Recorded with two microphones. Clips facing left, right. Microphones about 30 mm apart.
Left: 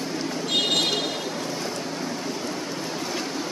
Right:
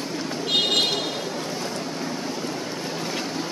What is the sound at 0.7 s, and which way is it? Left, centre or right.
Vehicle, centre.